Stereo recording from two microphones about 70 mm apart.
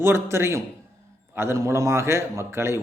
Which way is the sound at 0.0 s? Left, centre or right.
Right.